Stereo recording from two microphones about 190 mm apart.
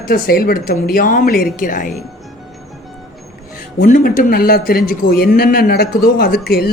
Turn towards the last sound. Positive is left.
turn(degrees=55)  # may be behind; listen again after turning